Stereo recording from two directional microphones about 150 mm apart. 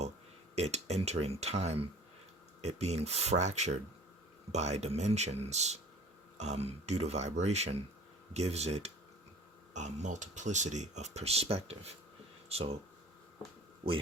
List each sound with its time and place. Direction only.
0.5 s speech: 45° right (ahead or behind)